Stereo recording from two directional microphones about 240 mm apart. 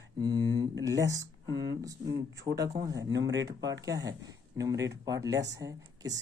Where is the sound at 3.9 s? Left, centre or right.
Centre.